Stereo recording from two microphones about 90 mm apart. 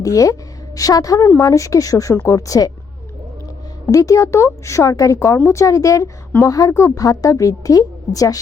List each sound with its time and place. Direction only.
0.0 s a woman's voice: 40° left (ahead or behind)
3.9 s a woman's voice: 35° left (ahead or behind)